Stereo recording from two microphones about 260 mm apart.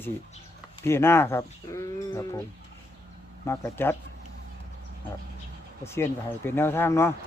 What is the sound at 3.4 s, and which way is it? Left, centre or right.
Speech, centre.